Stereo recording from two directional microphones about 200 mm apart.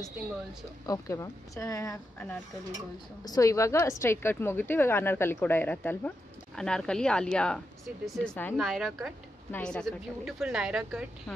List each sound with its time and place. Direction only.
0.8 s a woman's voice: 15° left (ahead or behind); by 11.3 s 5° right (ahead or behind)